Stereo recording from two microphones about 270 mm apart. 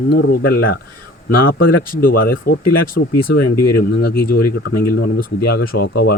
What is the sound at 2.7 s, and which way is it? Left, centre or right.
Speech, left.